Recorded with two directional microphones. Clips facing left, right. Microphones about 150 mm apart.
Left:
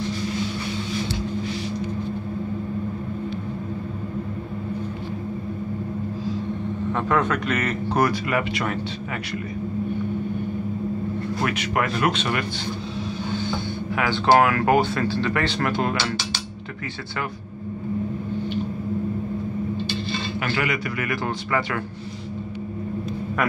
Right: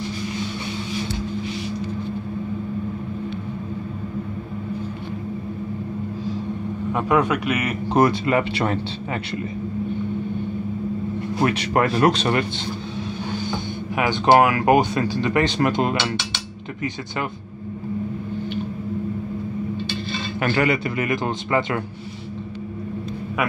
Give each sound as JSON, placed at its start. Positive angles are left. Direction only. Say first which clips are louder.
{"t": 6.9, "sound": "speech", "louder": "right 3 dB", "side_deg": -10}
{"t": 7.9, "sound": "a man's voice", "louder": "right 5 dB", "side_deg": -25}
{"t": 11.4, "sound": "speech", "louder": "right 6 dB", "side_deg": -35}
{"t": 13.9, "sound": "speech", "louder": "right 2 dB", "side_deg": -20}
{"t": 20.4, "sound": "a man's voice", "louder": "right 7 dB", "side_deg": -35}